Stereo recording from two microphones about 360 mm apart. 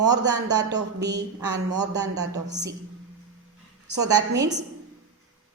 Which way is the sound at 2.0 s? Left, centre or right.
Centre.